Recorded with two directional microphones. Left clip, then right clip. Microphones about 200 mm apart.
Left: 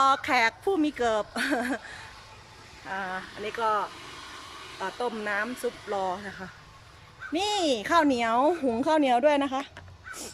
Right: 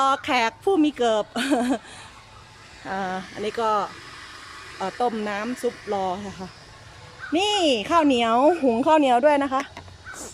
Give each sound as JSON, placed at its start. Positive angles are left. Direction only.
{"t": 0.0, "sound": "a woman's voice", "side_deg": -10}